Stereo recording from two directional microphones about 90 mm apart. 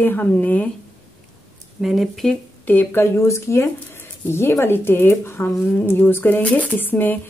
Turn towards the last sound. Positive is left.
turn(degrees=20)  # may be behind; listen again after turning